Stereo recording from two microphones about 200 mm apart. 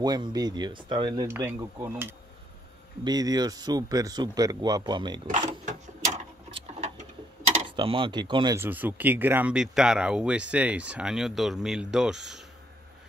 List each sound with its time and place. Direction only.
0.0 s speech: 20° right (ahead or behind)
6.5 s a sound: 30° right (ahead or behind)
7.6 s speech: 25° right (ahead or behind)
8.5 s speech: 10° right (ahead or behind)